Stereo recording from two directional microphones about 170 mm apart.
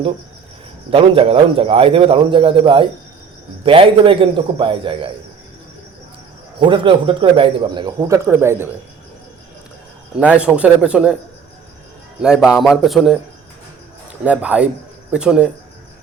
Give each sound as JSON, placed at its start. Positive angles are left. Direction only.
{"t": 0.9, "sound": "a man's voice", "side_deg": -30}
{"t": 6.6, "sound": "speech", "side_deg": -30}
{"t": 10.2, "sound": "a man's voice", "side_deg": -5}
{"t": 12.2, "sound": "a man's voice", "side_deg": -5}
{"t": 14.3, "sound": "a man's voice", "side_deg": -5}